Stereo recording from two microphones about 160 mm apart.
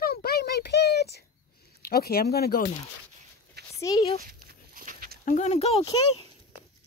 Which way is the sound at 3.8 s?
20° left (ahead or behind).